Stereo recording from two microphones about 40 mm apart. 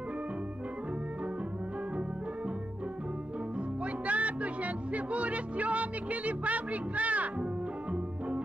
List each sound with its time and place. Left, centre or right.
3.8 s music: right